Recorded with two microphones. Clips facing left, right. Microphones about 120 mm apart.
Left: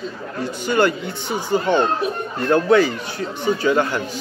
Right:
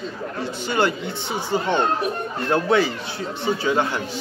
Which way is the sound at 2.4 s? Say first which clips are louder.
Left 4 dB; 25° right (ahead or behind).